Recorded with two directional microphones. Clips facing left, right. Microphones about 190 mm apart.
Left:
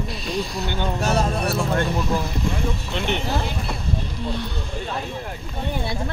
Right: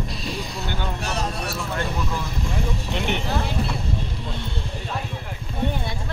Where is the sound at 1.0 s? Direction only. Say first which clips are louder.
Left 9 dB; 45° left (ahead or behind).